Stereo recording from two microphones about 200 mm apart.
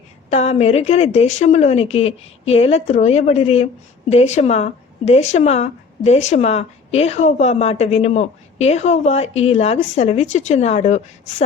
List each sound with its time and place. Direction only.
0.3 s speech: 35° left (ahead or behind)